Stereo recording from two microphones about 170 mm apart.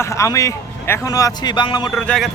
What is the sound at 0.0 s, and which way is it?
A man's voice, 15° left (ahead or behind).